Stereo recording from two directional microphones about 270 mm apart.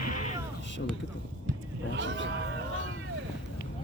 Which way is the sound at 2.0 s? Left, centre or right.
Right.